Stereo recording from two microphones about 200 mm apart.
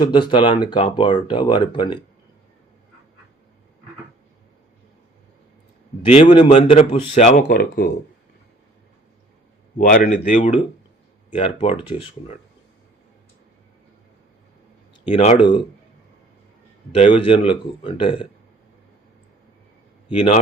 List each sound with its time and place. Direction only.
0.0 s speech: 25° left (ahead or behind)
6.1 s speech: 25° left (ahead or behind); by 7.9 s 45° left (ahead or behind)
9.7 s speech: 45° left (ahead or behind)
11.3 s speech: 25° left (ahead or behind)
15.1 s speech: 30° left (ahead or behind)
16.9 s speech: 25° left (ahead or behind)